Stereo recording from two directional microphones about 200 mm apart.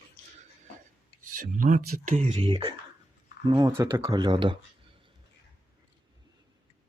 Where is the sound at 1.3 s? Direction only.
45° right (ahead or behind).